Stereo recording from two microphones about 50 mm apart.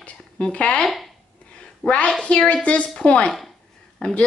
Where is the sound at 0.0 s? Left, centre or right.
Left.